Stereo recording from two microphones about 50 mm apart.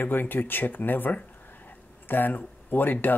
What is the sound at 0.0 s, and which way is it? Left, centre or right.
A man's voice, left.